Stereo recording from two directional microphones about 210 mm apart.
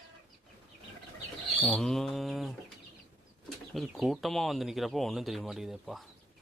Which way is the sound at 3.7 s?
Centre (ahead or behind).